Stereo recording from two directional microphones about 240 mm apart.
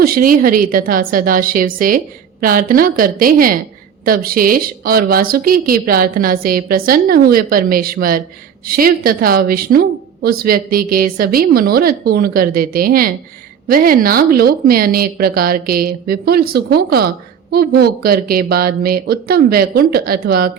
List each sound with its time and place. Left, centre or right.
0.0 s a woman's voice: right